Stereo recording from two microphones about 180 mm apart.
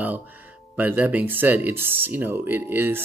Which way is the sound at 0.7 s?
10° right (ahead or behind).